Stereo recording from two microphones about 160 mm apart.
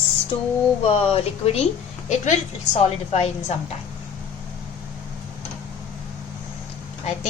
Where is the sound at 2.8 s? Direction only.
40° left (ahead or behind).